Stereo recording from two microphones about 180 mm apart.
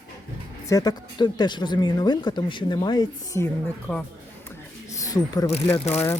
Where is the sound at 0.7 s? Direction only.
20° left (ahead or behind).